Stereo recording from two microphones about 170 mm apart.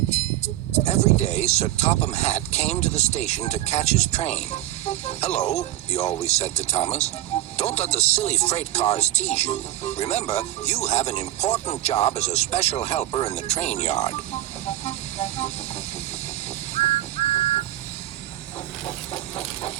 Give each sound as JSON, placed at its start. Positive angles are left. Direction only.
{"t": 0.1, "sound": "speech", "side_deg": 40}
{"t": 14.7, "sound": "vehicle", "side_deg": 40}
{"t": 16.7, "sound": "music", "side_deg": 40}
{"t": 18.9, "sound": "a sound", "side_deg": 40}